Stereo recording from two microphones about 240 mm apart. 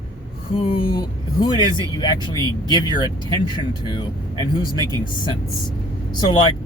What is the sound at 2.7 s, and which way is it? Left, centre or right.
Speech, centre.